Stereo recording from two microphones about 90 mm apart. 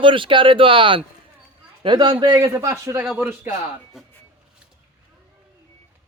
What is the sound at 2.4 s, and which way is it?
Speech, 35° right (ahead or behind).